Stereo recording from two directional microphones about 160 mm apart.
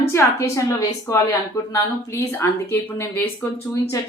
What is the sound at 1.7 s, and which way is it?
Speech, 15° left (ahead or behind).